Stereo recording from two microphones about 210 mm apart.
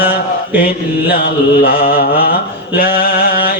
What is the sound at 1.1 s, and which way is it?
Mantra, 45° left (ahead or behind).